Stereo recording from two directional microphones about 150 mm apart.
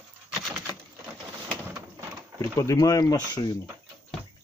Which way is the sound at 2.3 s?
20° left (ahead or behind).